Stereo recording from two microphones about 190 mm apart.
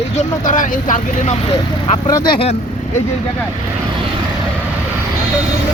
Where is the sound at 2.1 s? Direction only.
20° left (ahead or behind).